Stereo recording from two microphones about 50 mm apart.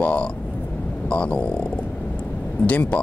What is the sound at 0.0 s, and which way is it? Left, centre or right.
Speech, left.